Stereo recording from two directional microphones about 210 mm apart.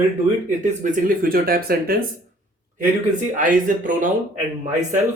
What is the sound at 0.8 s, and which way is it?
Speech, 40° right (ahead or behind).